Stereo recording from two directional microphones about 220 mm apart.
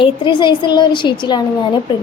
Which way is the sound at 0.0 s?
20° left (ahead or behind).